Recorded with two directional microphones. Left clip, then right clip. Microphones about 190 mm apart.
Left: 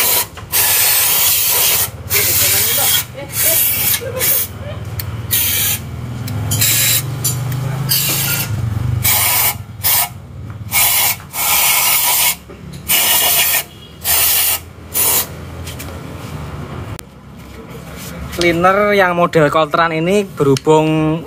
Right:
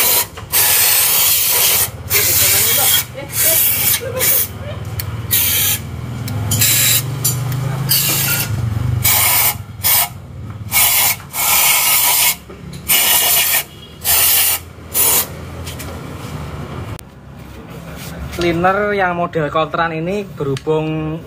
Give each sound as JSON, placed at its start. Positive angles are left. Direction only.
{"t": 0.0, "sound": "printer", "side_deg": -10}
{"t": 4.9, "sound": "spray", "side_deg": -10}
{"t": 6.2, "sound": "a sound", "side_deg": -10}
{"t": 10.7, "sound": "spray", "side_deg": -15}
{"t": 18.4, "sound": "speech", "side_deg": 30}